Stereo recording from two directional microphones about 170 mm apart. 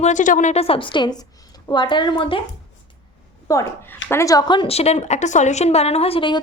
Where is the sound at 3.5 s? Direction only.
20° left (ahead or behind).